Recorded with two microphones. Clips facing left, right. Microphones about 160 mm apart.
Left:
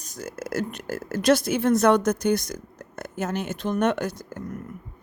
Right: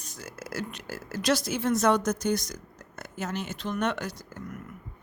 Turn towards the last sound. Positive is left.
turn(degrees=50)  # may be behind; listen again after turning